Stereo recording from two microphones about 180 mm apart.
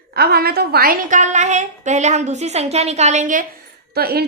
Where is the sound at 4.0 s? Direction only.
60° right (ahead or behind).